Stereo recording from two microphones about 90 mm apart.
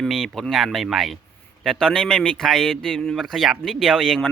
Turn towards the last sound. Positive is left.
turn(degrees=5)  # may be behind; listen again after turning